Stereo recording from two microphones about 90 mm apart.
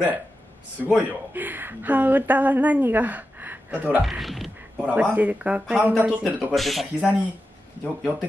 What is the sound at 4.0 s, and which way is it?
Speech, centre (ahead or behind).